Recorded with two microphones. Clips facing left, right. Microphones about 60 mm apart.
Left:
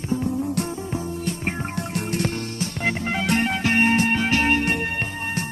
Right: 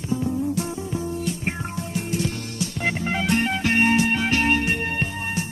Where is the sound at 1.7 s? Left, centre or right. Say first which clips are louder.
Left 1 dB; left.